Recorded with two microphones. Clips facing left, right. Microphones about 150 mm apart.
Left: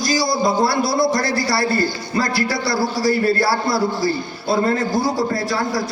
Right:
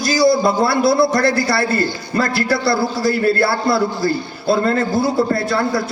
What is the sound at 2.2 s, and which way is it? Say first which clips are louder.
A man's voice: right 4 dB; 60° right (ahead or behind).